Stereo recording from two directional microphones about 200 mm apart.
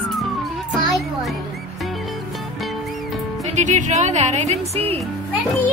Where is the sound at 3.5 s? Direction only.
35° right (ahead or behind).